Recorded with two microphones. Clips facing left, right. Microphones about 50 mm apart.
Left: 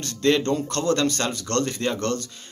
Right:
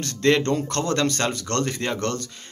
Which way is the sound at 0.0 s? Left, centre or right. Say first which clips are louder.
Right 1 dB; right.